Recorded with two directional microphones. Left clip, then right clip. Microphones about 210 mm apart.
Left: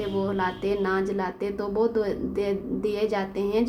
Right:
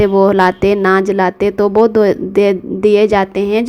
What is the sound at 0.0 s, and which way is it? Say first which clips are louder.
A woman's voice: right 17 dB; 40° right (ahead or behind).